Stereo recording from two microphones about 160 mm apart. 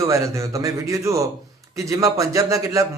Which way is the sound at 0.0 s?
20° right (ahead or behind).